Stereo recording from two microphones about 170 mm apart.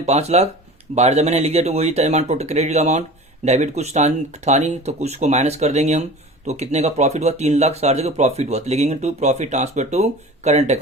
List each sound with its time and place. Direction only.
0.0 s speech: 40° right (ahead or behind)